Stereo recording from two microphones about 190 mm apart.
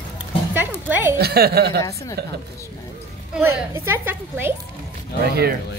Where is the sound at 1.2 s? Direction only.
55° right (ahead or behind).